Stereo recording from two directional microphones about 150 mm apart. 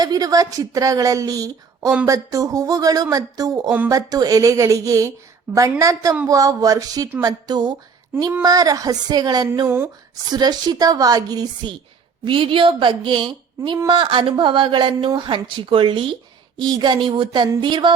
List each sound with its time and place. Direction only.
0.0 s speech: 25° right (ahead or behind)
9.6 s speech: 15° right (ahead or behind)
10.3 s a woman's voice: 30° right (ahead or behind)